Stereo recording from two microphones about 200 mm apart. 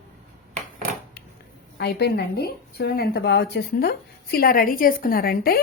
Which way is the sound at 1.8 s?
55° left (ahead or behind).